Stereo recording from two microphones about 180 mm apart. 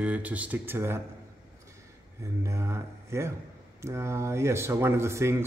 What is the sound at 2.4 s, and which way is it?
Speech, 15° right (ahead or behind).